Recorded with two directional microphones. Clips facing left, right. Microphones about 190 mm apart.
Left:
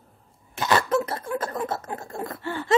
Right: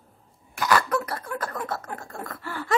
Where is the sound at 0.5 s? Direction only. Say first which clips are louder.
Left 1 dB; 25° left (ahead or behind).